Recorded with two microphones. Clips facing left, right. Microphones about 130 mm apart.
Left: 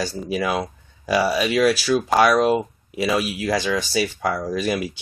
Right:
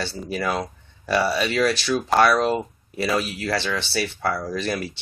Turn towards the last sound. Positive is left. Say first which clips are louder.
# left 3 dB
turn(degrees=10)  # may be behind; listen again after turning